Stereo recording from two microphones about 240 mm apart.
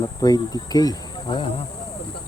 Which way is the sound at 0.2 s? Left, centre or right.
Centre.